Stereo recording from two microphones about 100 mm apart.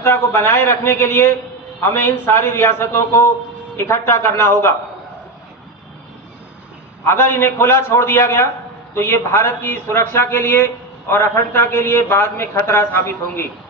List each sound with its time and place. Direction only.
0.0 s speech: 25° left (ahead or behind)
7.1 s speech: 25° left (ahead or behind)